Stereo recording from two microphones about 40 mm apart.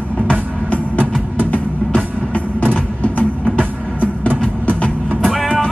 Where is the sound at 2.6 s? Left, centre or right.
Left.